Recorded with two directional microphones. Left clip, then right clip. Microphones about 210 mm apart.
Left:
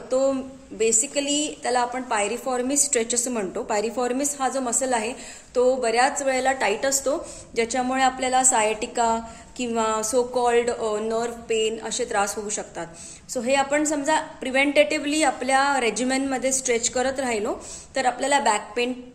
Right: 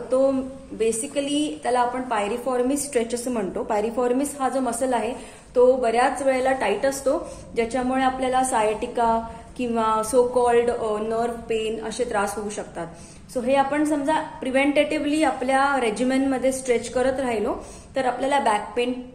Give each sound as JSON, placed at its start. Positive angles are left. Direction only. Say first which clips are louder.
{"t": 0.7, "sound": "a woman's voice", "louder": "left 1 dB", "side_deg": 35}